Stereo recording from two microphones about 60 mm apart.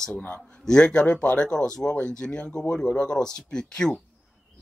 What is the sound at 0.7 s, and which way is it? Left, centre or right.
Speech, centre.